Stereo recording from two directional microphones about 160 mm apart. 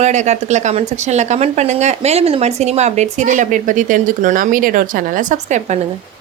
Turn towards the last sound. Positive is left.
turn(degrees=-50)  # may be behind; listen again after turning